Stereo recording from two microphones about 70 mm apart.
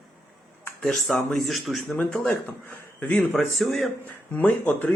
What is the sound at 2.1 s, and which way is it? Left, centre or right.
Speech, centre.